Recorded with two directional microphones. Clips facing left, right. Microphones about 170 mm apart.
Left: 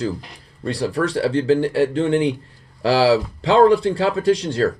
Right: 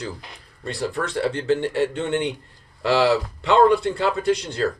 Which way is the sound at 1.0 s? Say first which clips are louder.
Left 5 dB; 30° left (ahead or behind).